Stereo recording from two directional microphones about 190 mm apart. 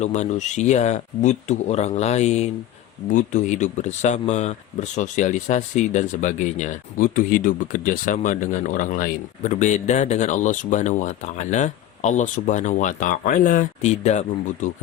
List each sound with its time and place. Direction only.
0.0 s speech: 35° left (ahead or behind)